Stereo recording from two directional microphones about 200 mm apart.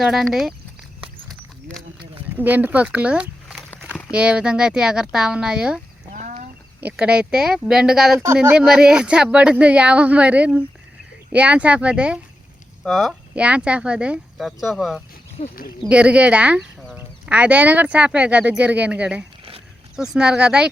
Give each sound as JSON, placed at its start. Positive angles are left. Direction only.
{"t": 0.0, "sound": "speech", "side_deg": 0}
{"t": 1.6, "sound": "a sound", "side_deg": 0}
{"t": 2.3, "sound": "speech", "side_deg": -10}
{"t": 6.8, "sound": "speech", "side_deg": -5}
{"t": 15.4, "sound": "speech", "side_deg": 35}
{"t": 15.9, "sound": "speech", "side_deg": -5}